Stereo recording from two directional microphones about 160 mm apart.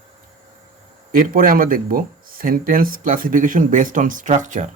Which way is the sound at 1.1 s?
60° right (ahead or behind).